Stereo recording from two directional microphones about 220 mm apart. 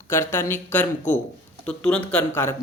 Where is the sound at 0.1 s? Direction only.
10° left (ahead or behind).